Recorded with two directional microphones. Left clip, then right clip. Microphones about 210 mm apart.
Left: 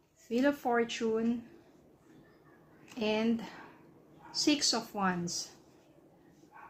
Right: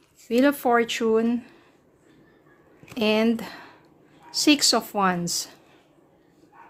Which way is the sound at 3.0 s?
55° right (ahead or behind).